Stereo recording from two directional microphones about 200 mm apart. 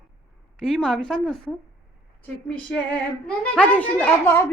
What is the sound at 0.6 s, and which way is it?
Speech, 5° left (ahead or behind).